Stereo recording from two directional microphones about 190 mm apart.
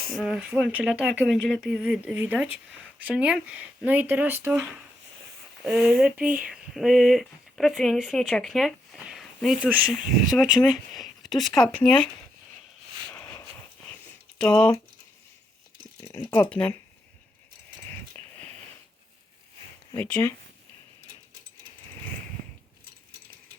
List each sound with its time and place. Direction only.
0.1 s speech: centre (ahead or behind)
6.2 s speech: 50° right (ahead or behind)
6.5 s speech: centre (ahead or behind)
14.3 s speech: 5° left (ahead or behind)
16.3 s speech: 10° left (ahead or behind)
18.2 s a sound: 35° right (ahead or behind)
20.0 s speech: 5° left (ahead or behind)